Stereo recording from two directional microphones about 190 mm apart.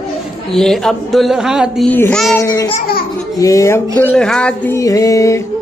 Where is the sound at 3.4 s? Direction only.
15° left (ahead or behind).